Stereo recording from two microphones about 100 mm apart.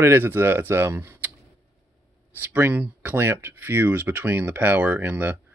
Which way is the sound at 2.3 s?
20° right (ahead or behind).